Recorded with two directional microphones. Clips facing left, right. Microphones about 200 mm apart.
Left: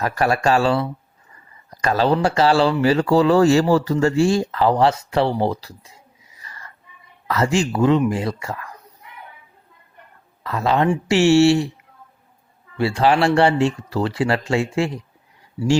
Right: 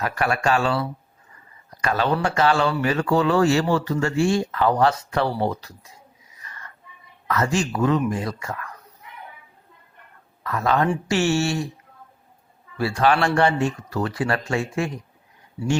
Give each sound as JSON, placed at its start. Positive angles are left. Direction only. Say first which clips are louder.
{"t": 0.0, "sound": "speech", "louder": "left 4 dB", "side_deg": 40}
{"t": 6.4, "sound": "a sound", "louder": "left 1 dB", "side_deg": 35}
{"t": 7.3, "sound": "speech", "louder": "left 3 dB", "side_deg": 30}
{"t": 10.4, "sound": "speech", "louder": "left 2 dB", "side_deg": 30}
{"t": 12.7, "sound": "speech", "louder": "left 3 dB", "side_deg": 25}